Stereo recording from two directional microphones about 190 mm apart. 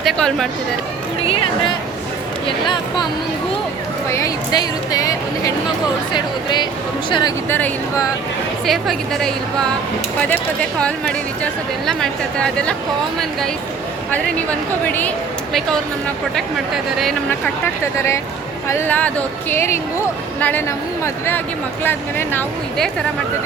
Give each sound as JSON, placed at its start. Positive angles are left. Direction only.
{"t": 0.0, "sound": "speech", "side_deg": 0}
{"t": 1.2, "sound": "speech", "side_deg": 30}
{"t": 4.1, "sound": "speech", "side_deg": 20}
{"t": 6.1, "sound": "speech", "side_deg": 25}
{"t": 7.5, "sound": "speech", "side_deg": 10}
{"t": 14.8, "sound": "speech", "side_deg": 10}
{"t": 16.3, "sound": "speech", "side_deg": 0}
{"t": 18.7, "sound": "speech", "side_deg": 10}